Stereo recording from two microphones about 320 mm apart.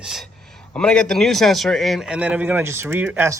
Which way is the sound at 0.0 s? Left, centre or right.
Centre.